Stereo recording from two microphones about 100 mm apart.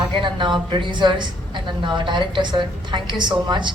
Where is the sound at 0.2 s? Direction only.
50° right (ahead or behind).